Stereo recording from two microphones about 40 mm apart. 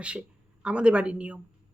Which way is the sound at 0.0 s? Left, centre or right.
Right.